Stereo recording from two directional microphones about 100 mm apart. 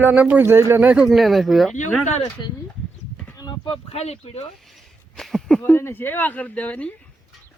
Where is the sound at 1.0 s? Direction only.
Centre (ahead or behind).